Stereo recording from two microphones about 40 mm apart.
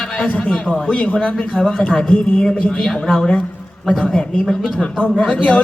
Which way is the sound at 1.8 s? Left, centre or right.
Centre.